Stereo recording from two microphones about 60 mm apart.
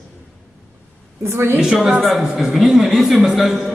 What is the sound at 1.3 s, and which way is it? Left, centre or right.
Speech, right.